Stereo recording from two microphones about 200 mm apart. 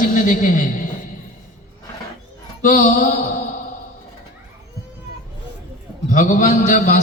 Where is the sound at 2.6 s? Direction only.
40° left (ahead or behind).